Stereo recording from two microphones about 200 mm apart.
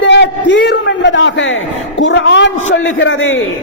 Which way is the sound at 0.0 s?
60° left (ahead or behind).